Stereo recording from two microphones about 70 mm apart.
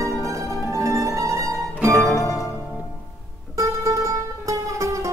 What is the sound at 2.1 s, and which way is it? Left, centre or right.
Music, left.